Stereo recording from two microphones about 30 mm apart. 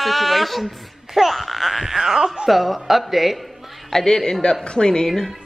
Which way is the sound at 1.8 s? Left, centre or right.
Centre.